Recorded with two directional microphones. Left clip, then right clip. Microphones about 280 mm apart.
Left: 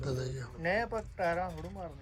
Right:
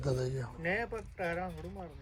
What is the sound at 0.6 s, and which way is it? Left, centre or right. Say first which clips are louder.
Speech: left 4 dB; left.